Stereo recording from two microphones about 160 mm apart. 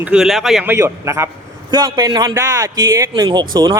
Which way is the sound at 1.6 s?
25° right (ahead or behind).